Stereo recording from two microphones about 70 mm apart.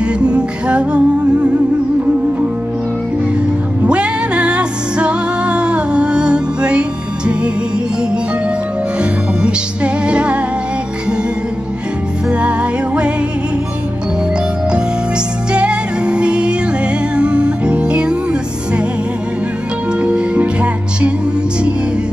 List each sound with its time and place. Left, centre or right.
0.0 s music: centre
3.8 s music: centre
9.4 s music: centre
12.3 s music: centre
15.5 s music: centre
19.9 s music: centre